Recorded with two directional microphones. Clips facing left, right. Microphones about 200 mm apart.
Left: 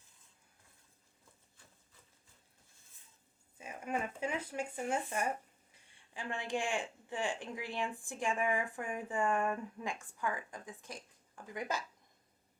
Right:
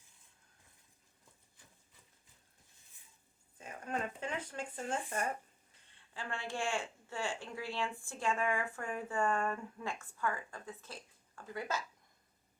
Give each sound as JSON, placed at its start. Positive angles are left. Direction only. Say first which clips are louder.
{"t": 3.6, "sound": "speech", "louder": "left 1 dB", "side_deg": 10}